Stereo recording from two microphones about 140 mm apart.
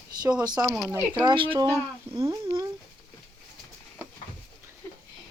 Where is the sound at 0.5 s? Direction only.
5° right (ahead or behind).